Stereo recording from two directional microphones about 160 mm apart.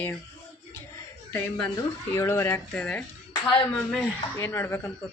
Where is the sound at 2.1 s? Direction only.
20° left (ahead or behind).